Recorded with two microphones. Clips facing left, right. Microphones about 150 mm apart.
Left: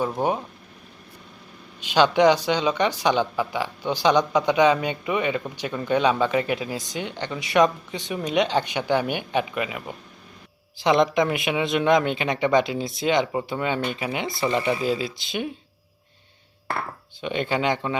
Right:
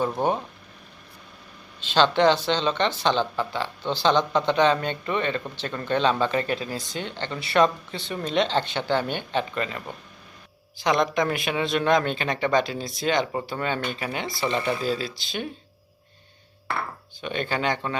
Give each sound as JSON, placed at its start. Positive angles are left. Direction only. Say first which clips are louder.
{"t": 0.2, "sound": "speech", "louder": "left 1 dB", "side_deg": 10}
{"t": 1.8, "sound": "speech", "louder": "left 2 dB", "side_deg": 15}
{"t": 10.8, "sound": "speech", "louder": "left 3 dB", "side_deg": 20}
{"t": 17.2, "sound": "speech", "louder": "left 3 dB", "side_deg": 20}